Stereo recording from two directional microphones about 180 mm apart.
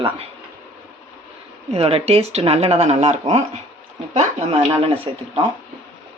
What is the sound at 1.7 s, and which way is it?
Speech, 35° right (ahead or behind).